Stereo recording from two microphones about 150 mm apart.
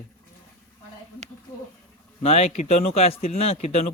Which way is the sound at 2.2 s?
45° left (ahead or behind).